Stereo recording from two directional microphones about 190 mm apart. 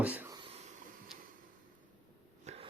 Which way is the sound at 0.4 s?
35° right (ahead or behind).